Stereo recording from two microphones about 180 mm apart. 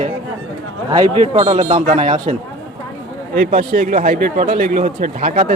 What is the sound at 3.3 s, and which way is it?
Speech, 55° right (ahead or behind).